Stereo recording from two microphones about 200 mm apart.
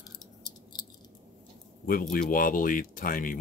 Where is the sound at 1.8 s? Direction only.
45° left (ahead or behind).